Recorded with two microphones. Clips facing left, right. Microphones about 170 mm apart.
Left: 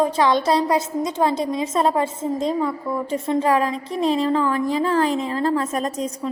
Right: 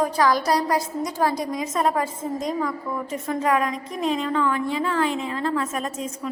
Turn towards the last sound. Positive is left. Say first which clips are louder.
# left 4 dB
turn(degrees=35)  # may be behind; listen again after turning